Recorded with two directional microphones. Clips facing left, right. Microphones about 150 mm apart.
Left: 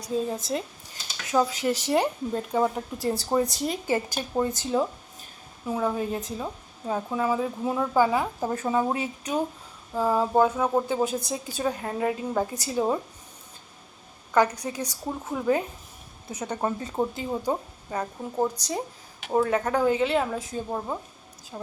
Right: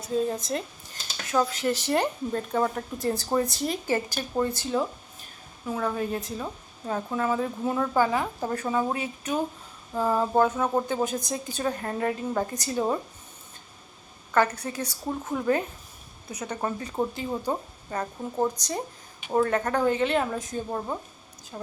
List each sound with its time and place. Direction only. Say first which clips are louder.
0.3 s a woman's voice: even; 10° left (ahead or behind)
9.9 s a woman's voice: left 1 dB; 5° left (ahead or behind)
14.3 s a woman's voice: left 1 dB; 15° left (ahead or behind)
16.5 s a woman's voice: left 2 dB; 20° left (ahead or behind)